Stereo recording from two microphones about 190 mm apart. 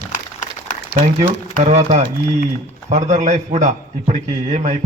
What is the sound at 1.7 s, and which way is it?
A man's voice, 35° right (ahead or behind).